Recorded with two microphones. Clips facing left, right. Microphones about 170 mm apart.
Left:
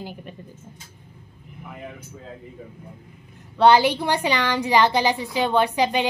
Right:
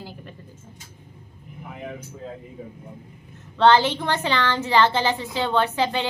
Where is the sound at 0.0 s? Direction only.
15° left (ahead or behind).